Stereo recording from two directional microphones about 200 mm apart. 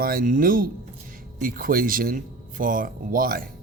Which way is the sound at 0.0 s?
45° right (ahead or behind).